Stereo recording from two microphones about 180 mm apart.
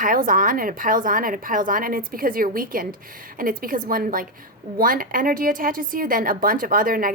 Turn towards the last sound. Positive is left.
turn(degrees=-50)  # may be behind; listen again after turning